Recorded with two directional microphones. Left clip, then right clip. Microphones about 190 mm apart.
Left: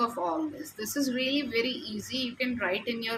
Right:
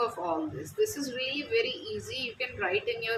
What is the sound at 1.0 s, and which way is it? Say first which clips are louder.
Speech: left 4 dB; 60° left (ahead or behind).